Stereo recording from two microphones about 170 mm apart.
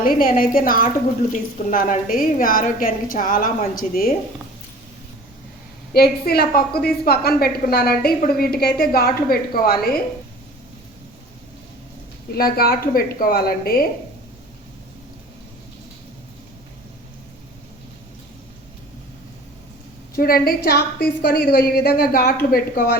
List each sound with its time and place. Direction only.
0.0 s a woman's voice: 55° left (ahead or behind)
5.9 s a woman's voice: 65° left (ahead or behind)
12.3 s a woman's voice: 65° left (ahead or behind)
20.1 s a woman's voice: 60° left (ahead or behind)